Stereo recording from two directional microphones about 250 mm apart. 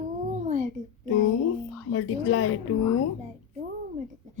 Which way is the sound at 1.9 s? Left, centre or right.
Left.